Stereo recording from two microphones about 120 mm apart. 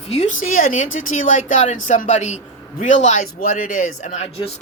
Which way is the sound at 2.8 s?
85° left.